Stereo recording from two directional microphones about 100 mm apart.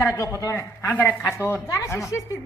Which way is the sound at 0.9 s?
15° left (ahead or behind).